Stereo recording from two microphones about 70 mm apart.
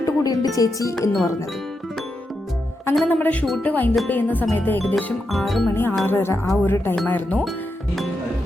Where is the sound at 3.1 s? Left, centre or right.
Left.